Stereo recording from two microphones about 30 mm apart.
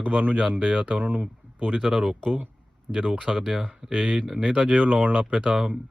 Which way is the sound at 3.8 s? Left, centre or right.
Centre.